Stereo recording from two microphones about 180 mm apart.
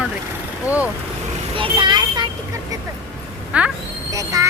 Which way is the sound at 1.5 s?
25° right (ahead or behind).